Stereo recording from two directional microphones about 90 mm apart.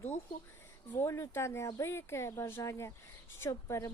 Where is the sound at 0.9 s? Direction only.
30° left (ahead or behind).